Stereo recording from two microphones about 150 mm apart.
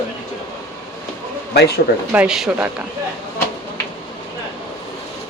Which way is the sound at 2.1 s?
5° right (ahead or behind).